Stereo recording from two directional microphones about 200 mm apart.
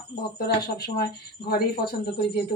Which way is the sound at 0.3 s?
50° left (ahead or behind).